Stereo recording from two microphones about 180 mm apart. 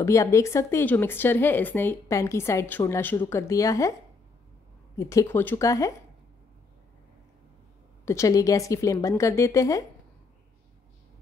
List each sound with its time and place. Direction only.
0.0 s speech: 15° left (ahead or behind)
4.9 s speech: 15° left (ahead or behind)
8.0 s speech: 15° left (ahead or behind)